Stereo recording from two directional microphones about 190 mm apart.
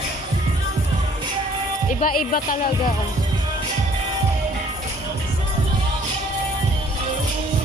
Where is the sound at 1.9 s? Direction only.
45° left (ahead or behind).